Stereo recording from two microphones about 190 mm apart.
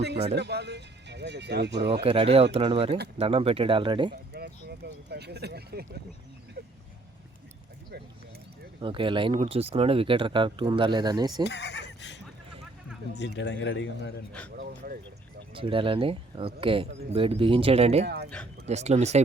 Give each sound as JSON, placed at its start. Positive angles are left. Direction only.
{"t": 0.3, "sound": "speech", "side_deg": -65}
{"t": 2.0, "sound": "speech", "side_deg": -30}
{"t": 4.1, "sound": "speech", "side_deg": -60}
{"t": 8.8, "sound": "speech", "side_deg": -25}
{"t": 11.4, "sound": "neigh", "side_deg": 65}
{"t": 13.1, "sound": "speech", "side_deg": 70}
{"t": 14.5, "sound": "speech", "side_deg": -55}
{"t": 15.5, "sound": "speech", "side_deg": -25}
{"t": 18.0, "sound": "speech", "side_deg": -60}
{"t": 18.7, "sound": "speech", "side_deg": -35}